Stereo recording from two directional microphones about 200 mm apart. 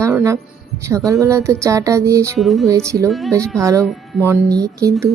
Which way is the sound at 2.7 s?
15° right (ahead or behind).